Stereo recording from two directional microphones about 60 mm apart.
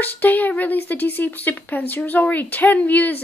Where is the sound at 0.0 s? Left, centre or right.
Left.